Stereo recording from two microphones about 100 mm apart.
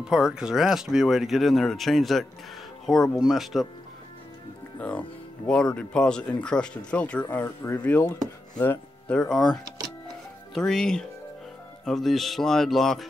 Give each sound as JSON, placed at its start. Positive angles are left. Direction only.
{"t": 0.0, "sound": "speech", "side_deg": -5}
{"t": 4.7, "sound": "speech", "side_deg": 10}
{"t": 7.2, "sound": "speech", "side_deg": 25}
{"t": 8.5, "sound": "speech", "side_deg": 10}